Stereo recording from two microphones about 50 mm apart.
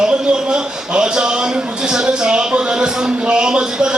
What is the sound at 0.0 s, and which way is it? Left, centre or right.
A man's voice, centre.